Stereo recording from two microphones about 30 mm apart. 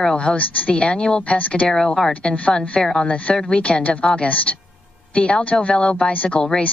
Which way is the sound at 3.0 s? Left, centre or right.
Left.